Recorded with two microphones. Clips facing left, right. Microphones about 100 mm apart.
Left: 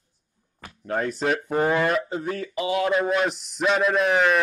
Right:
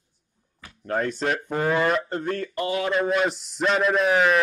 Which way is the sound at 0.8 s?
Centre (ahead or behind).